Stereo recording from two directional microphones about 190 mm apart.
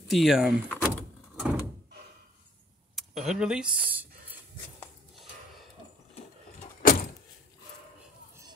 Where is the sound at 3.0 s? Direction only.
Centre (ahead or behind).